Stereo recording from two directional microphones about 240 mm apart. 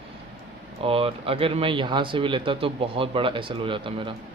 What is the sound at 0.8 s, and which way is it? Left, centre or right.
Speech, right.